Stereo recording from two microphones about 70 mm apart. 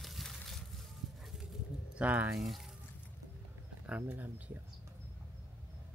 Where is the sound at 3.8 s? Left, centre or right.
Right.